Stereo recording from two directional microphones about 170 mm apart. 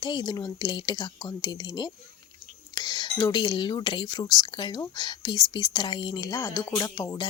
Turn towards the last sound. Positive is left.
turn(degrees=20)  # may be behind; listen again after turning